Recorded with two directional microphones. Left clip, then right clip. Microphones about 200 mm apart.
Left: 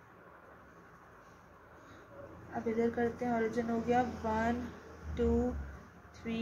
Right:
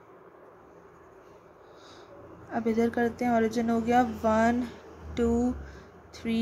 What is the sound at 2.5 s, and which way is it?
Speech, 50° right (ahead or behind).